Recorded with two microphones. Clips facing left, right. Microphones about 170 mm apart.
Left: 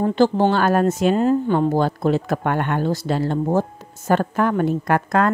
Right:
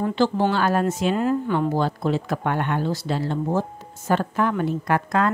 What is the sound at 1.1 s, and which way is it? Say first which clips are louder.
Speech: left 4 dB; 30° left (ahead or behind).